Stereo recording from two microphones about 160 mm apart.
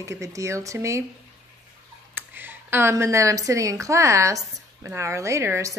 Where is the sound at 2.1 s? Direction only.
10° right (ahead or behind).